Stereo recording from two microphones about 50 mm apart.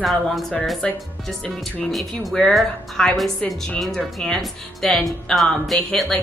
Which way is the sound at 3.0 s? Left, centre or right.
Centre.